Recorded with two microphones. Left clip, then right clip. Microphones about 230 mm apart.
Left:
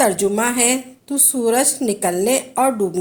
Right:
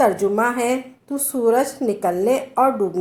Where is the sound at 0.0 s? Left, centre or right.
Left.